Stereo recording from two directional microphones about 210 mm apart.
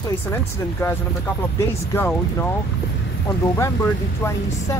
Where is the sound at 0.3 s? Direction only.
10° left (ahead or behind).